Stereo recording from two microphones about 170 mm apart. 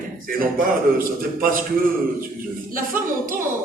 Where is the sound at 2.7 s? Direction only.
55° right (ahead or behind).